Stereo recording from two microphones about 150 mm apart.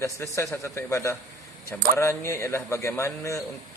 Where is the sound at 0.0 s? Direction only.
20° left (ahead or behind).